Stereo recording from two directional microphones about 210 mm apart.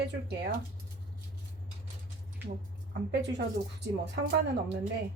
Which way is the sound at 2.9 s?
50° right (ahead or behind).